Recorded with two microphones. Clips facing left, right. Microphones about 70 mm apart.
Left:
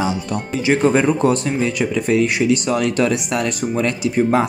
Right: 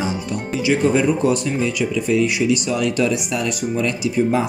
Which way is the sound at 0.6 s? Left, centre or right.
Left.